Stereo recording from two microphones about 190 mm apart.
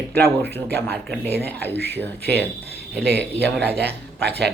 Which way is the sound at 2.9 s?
60° right (ahead or behind).